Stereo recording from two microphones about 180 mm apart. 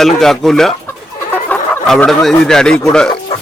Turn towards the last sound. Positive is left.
turn(degrees=5)  # may be behind; listen again after turning